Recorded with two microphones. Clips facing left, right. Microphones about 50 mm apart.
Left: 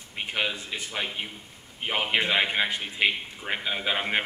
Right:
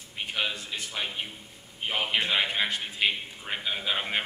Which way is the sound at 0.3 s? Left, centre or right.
Centre.